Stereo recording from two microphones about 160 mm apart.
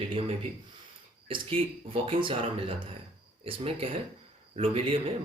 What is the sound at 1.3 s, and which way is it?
Speech, 35° right (ahead or behind).